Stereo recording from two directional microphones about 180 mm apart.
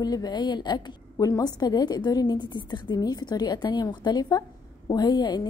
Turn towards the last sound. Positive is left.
turn(degrees=25)  # may be behind; listen again after turning